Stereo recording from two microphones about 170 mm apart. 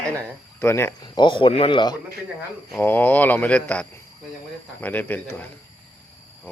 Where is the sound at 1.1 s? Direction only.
25° left (ahead or behind).